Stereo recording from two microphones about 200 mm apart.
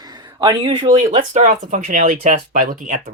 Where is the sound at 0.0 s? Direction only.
20° right (ahead or behind).